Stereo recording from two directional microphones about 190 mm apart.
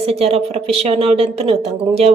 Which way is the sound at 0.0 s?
30° right (ahead or behind).